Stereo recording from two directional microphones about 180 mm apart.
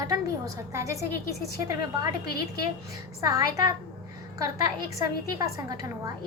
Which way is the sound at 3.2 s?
20° right (ahead or behind).